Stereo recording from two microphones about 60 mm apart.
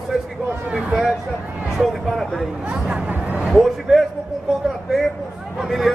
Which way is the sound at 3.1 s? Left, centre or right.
Right.